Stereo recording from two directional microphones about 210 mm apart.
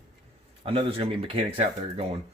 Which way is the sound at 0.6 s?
25° right (ahead or behind).